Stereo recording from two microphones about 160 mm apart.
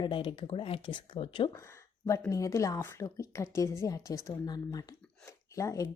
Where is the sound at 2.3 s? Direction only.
20° left (ahead or behind).